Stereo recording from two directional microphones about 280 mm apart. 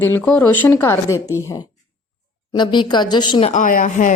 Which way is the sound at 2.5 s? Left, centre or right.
Centre.